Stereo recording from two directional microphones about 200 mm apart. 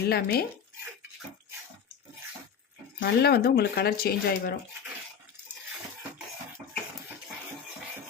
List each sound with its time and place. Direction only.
0.1 s speech: 50° left (ahead or behind)
3.0 s speech: 50° left (ahead or behind)